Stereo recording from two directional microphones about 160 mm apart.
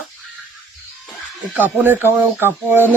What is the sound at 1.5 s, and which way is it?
Speech, 10° right (ahead or behind).